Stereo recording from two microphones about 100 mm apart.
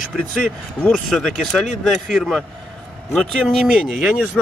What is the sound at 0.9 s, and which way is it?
Speech, 5° left (ahead or behind).